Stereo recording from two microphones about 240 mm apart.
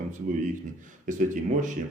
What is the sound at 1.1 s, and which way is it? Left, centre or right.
Speech, right.